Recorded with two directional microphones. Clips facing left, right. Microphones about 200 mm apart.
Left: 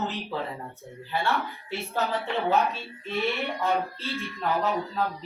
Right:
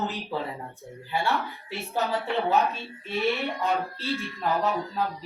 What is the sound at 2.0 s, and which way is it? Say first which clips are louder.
Music: right 1 dB; centre (ahead or behind).